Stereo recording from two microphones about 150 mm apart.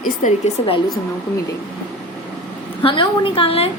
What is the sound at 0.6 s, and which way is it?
Speech, 35° left (ahead or behind).